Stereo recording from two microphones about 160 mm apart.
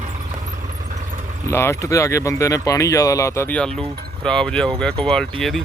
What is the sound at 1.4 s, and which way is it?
Speech, 15° left (ahead or behind).